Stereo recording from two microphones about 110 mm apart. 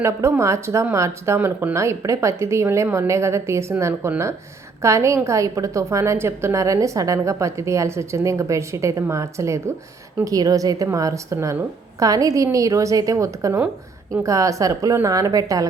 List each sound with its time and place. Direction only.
0.0 s a woman's voice: 25° right (ahead or behind)